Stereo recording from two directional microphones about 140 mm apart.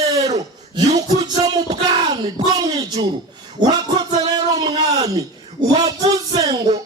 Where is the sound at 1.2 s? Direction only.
30° right (ahead or behind).